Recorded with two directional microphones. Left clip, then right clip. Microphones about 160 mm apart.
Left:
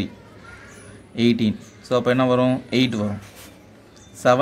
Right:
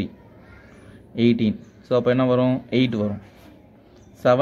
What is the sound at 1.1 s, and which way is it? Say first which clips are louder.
Speech: even; 20° right (ahead or behind).